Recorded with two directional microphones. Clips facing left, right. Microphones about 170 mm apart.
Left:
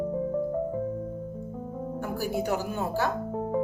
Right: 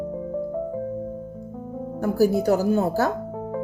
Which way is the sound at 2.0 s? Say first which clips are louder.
Right 11 dB; 35° right (ahead or behind).